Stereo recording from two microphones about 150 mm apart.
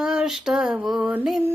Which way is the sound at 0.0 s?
5° right (ahead or behind).